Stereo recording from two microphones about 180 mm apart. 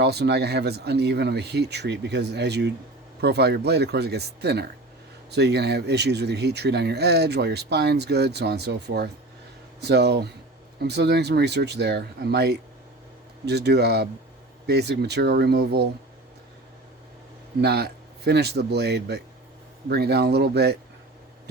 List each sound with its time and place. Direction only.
0.0 s speech: 65° right (ahead or behind)
17.6 s speech: 65° right (ahead or behind)